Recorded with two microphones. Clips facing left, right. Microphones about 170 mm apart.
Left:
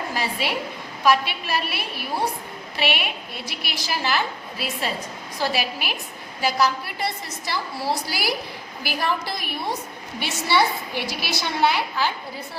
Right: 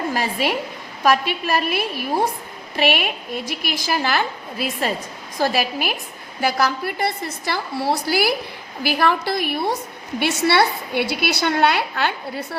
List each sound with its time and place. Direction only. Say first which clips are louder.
0.1 s a woman's voice: right 2 dB; 50° right (ahead or behind); by 12.5 s 65° right (ahead or behind)